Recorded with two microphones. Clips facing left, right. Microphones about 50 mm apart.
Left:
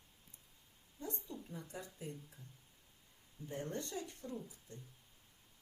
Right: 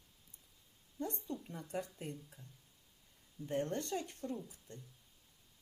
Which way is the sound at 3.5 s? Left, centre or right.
Right.